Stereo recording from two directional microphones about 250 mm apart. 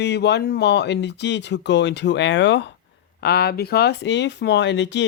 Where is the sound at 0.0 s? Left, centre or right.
Left.